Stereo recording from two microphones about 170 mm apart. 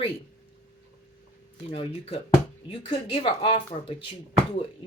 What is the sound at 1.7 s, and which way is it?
Speech, 35° left (ahead or behind).